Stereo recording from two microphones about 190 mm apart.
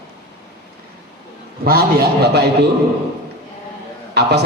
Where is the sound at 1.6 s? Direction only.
55° right (ahead or behind).